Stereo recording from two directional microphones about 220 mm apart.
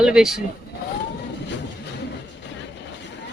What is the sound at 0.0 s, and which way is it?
Speech, 5° right (ahead or behind).